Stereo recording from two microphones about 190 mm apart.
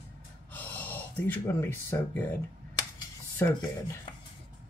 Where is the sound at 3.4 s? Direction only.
15° left (ahead or behind).